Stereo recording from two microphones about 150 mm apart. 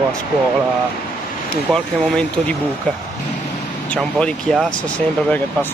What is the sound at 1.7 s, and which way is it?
Speech, 10° left (ahead or behind).